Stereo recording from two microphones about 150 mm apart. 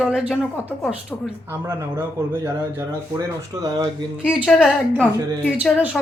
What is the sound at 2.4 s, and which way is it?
Speech, 20° right (ahead or behind).